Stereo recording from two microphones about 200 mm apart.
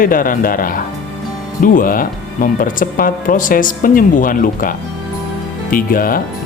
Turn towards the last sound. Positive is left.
turn(degrees=45)  # may be behind; listen again after turning